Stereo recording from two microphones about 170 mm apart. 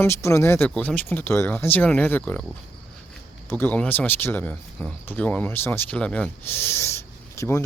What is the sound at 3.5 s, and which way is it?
Speech, 10° left (ahead or behind).